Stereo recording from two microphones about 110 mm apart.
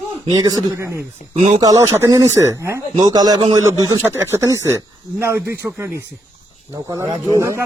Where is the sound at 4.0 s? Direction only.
20° right (ahead or behind).